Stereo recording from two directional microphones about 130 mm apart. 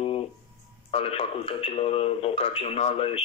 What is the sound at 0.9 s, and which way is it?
Speech, 50° left (ahead or behind).